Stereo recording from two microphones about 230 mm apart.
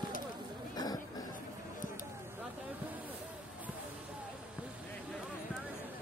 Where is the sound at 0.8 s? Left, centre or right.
Centre.